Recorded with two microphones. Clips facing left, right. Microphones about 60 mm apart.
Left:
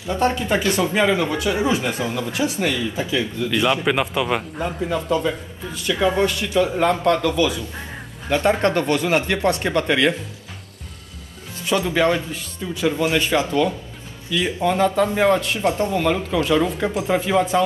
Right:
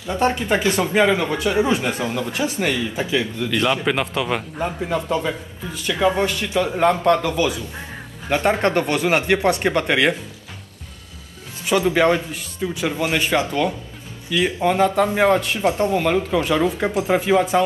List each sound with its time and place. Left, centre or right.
0.1 s speech: centre
0.9 s speech: centre
2.6 s speech: centre
3.4 s speech: centre
4.6 s speech: centre
5.6 s speech: centre; by 10.1 s right
11.7 s speech: centre
14.6 s speech: centre